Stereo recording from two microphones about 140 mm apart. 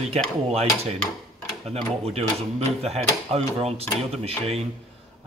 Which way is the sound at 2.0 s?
50° right (ahead or behind).